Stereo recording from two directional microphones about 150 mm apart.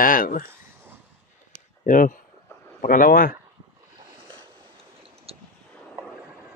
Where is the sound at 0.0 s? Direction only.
70° left (ahead or behind).